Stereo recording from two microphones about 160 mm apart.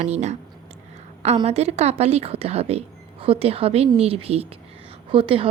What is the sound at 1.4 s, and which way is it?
A woman's voice, 40° right (ahead or behind).